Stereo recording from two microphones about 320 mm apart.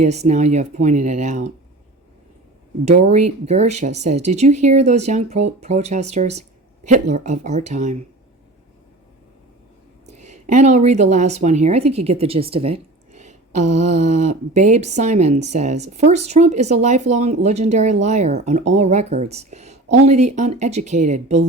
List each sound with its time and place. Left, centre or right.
0.0 s speech: right
3.0 s speech: centre
10.1 s speech: right